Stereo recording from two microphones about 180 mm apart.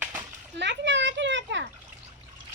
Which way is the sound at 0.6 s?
85° right.